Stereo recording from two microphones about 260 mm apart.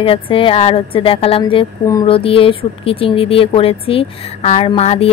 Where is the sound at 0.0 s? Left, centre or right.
Left.